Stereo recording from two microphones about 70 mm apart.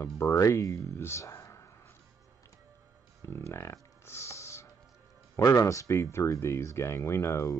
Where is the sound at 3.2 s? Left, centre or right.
Left.